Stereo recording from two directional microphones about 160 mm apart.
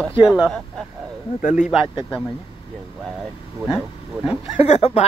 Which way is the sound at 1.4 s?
50° left (ahead or behind).